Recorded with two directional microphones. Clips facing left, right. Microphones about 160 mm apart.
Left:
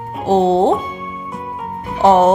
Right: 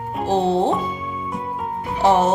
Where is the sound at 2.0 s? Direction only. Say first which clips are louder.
Left 6 dB; 55° left (ahead or behind).